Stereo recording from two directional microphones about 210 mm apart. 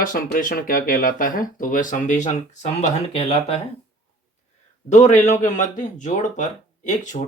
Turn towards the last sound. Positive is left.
turn(degrees=35)  # may be behind; listen again after turning